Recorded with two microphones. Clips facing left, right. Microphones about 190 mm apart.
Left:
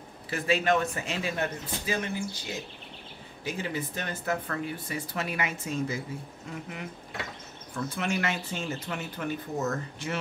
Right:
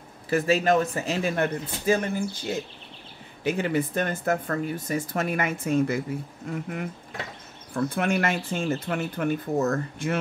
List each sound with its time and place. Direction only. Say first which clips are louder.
0.3 s speech: right 5 dB; 40° right (ahead or behind)
1.3 s speech: right 5 dB; 50° right (ahead or behind)
7.7 s speech: right 6 dB; 55° right (ahead or behind)